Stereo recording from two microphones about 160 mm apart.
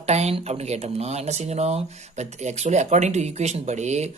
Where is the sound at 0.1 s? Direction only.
40° right (ahead or behind).